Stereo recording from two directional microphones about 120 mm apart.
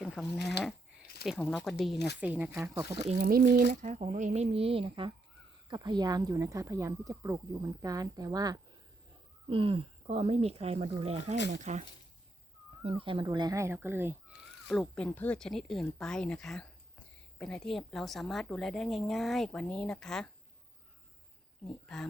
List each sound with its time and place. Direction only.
0.0 s speech: centre (ahead or behind)
2.2 s speech: 15° right (ahead or behind)
3.1 s speech: 90° right; by 8.5 s 30° right (ahead or behind)
9.5 s speech: 50° right (ahead or behind); by 11.9 s 70° right (ahead or behind)
12.9 s speech: 45° right (ahead or behind)
13.2 s speech: 35° right (ahead or behind)
13.6 s speech: 20° right (ahead or behind)
14.7 s a woman's voice: 5° left (ahead or behind)